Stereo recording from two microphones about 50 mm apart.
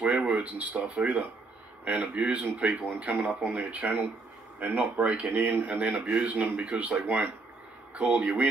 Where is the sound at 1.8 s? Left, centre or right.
Right.